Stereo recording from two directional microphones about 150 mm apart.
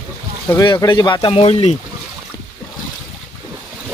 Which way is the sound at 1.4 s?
45° left (ahead or behind).